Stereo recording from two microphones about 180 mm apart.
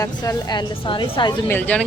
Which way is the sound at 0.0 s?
20° left (ahead or behind).